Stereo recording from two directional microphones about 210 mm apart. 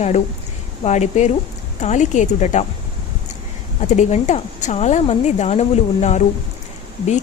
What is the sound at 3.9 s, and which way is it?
Speech, 35° left (ahead or behind).